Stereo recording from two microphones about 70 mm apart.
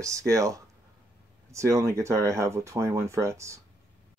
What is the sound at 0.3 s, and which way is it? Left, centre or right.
Speech, right.